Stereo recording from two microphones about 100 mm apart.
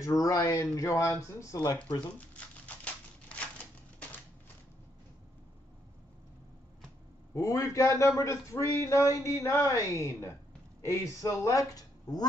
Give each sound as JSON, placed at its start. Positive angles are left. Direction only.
{"t": 0.2, "sound": "a man's voice", "side_deg": 35}
{"t": 2.0, "sound": "crumpling", "side_deg": 15}
{"t": 7.3, "sound": "a man's voice", "side_deg": 35}